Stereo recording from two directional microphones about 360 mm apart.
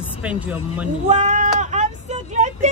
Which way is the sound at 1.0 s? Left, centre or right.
Centre.